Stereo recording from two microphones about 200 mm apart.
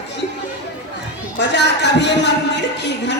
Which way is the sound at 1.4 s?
60° left (ahead or behind).